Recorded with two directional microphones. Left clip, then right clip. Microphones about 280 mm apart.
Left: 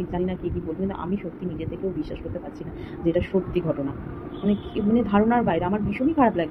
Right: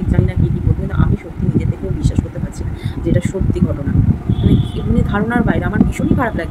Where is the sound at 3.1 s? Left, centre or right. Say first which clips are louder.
Right 2 dB; centre.